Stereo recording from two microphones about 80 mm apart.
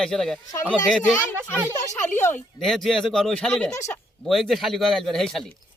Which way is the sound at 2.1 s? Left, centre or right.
Left.